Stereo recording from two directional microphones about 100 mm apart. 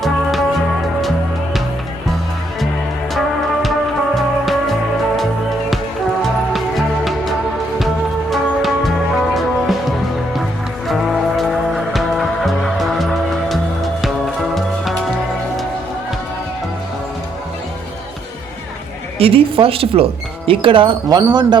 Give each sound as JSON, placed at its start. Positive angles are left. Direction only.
{"t": 0.0, "sound": "music", "side_deg": 0}
{"t": 3.2, "sound": "music", "side_deg": 0}
{"t": 6.2, "sound": "music", "side_deg": 0}
{"t": 10.8, "sound": "music", "side_deg": 0}
{"t": 19.2, "sound": "speech", "side_deg": -65}
{"t": 21.1, "sound": "speech", "side_deg": -45}